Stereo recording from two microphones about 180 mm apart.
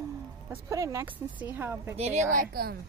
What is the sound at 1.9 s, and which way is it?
Speech, 40° right (ahead or behind).